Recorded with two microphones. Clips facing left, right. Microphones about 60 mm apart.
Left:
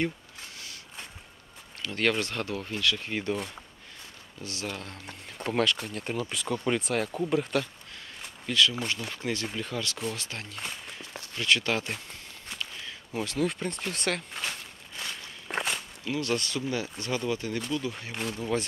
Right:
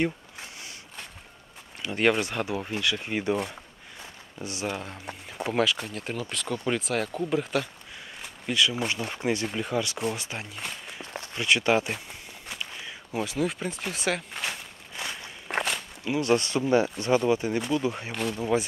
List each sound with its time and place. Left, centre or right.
1.8 s speech: centre
4.4 s speech: centre
8.5 s speech: centre
11.3 s walk: centre
15.5 s walk: centre
16.1 s speech: right
18.1 s speech: centre